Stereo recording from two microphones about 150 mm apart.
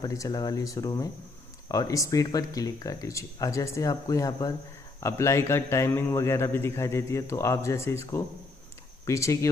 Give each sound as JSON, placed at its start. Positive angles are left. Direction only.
{"t": 0.0, "sound": "a man's voice", "side_deg": 25}